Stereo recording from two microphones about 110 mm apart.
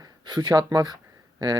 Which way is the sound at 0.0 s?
40° right (ahead or behind).